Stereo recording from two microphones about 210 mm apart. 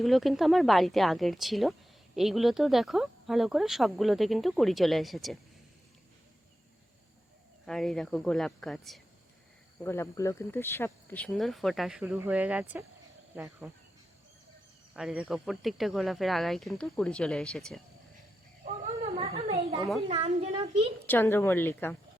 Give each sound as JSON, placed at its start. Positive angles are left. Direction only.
{"t": 0.0, "sound": "speech", "side_deg": 0}
{"t": 7.7, "sound": "speech", "side_deg": 0}
{"t": 9.8, "sound": "speech", "side_deg": 10}
{"t": 14.9, "sound": "speech", "side_deg": -5}
{"t": 19.1, "sound": "a sound", "side_deg": -25}
{"t": 20.1, "sound": "speech", "side_deg": -30}
{"t": 21.1, "sound": "a woman's voice", "side_deg": 10}